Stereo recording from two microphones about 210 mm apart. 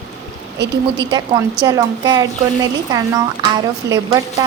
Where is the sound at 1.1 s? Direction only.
20° right (ahead or behind).